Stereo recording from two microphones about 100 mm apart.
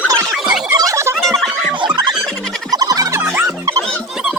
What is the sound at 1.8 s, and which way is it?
Squeal, 45° right (ahead or behind).